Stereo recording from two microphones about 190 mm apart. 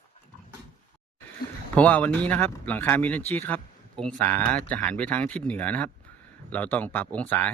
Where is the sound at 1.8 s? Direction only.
10° left (ahead or behind).